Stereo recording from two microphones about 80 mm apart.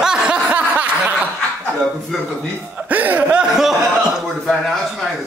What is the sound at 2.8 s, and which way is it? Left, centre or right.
Speech, right.